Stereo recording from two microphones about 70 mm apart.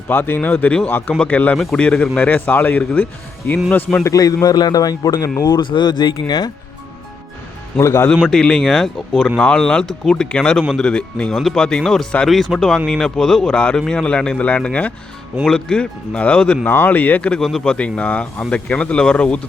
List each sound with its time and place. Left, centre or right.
0.1 s speech: left
1.2 s speech: left
1.5 s a man's voice: centre
2.1 s speech: left
4.0 s a man's voice: left
5.4 s speech: left
6.2 s speech: left
7.8 s speech: left
8.3 s a man's voice: centre
17.4 s speech: centre
17.7 s a man's voice: centre